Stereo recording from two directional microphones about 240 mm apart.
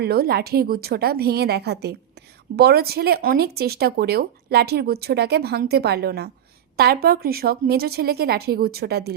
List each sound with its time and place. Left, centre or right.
0.0 s speech: right